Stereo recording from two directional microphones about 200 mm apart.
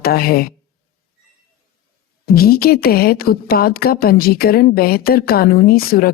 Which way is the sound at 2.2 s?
50° left (ahead or behind).